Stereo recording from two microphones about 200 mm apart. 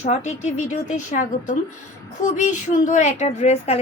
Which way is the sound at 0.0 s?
35° left (ahead or behind).